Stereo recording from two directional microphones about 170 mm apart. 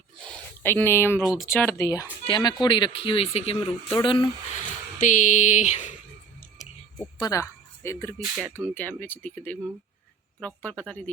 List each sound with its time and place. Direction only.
0.6 s speech: 10° left (ahead or behind); by 4.3 s 30° left (ahead or behind)
4.9 s a sound: 50° left (ahead or behind)
7.0 s speech: 20° left (ahead or behind)
8.2 s speech: centre (ahead or behind)